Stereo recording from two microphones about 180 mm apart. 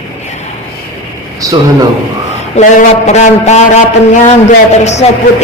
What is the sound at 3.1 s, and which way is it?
A man's voice, 40° left (ahead or behind).